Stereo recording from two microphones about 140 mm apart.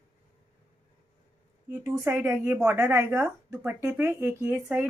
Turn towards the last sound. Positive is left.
turn(degrees=-15)  # may be behind; listen again after turning